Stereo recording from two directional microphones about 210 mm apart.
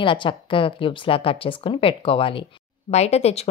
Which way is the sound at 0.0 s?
25° left (ahead or behind).